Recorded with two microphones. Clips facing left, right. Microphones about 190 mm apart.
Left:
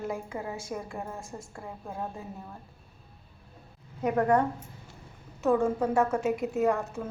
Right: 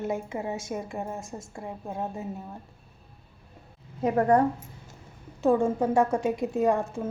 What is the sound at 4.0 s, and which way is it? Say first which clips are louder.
Speech: right 2 dB; 30° right (ahead or behind).